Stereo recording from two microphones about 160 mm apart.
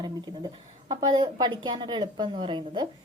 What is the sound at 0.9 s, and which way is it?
A woman's voice, 25° right (ahead or behind).